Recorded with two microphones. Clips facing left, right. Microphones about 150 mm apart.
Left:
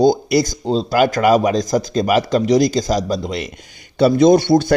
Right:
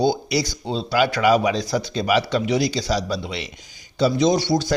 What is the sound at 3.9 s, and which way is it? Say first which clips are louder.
Speech: left 7 dB; 55° left (ahead or behind).